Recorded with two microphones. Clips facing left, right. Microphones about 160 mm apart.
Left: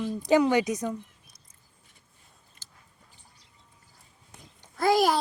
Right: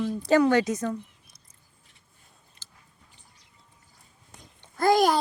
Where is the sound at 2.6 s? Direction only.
45° left (ahead or behind).